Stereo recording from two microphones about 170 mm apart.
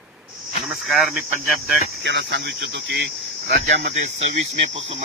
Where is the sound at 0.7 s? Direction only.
Centre (ahead or behind).